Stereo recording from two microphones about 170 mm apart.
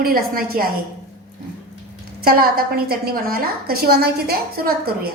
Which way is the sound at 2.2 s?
60° right (ahead or behind).